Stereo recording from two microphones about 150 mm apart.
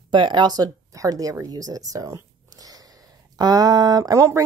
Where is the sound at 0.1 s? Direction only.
30° right (ahead or behind).